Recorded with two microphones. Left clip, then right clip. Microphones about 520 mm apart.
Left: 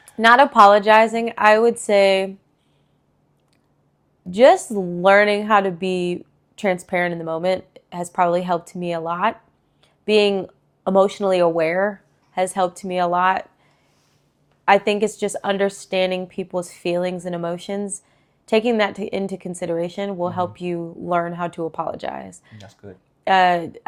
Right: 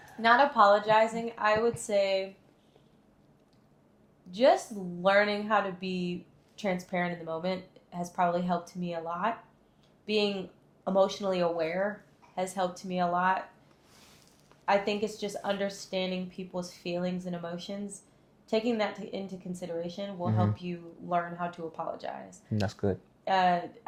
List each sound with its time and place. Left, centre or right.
0.2 s a woman's voice: left
5.0 s a woman's voice: left
14.6 s a woman's voice: left
22.5 s speech: right
23.2 s a woman's voice: left